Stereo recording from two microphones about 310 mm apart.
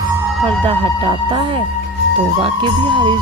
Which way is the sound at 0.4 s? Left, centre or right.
Centre.